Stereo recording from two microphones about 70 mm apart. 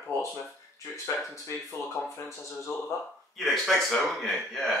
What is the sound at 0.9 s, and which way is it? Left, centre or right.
Speech, left.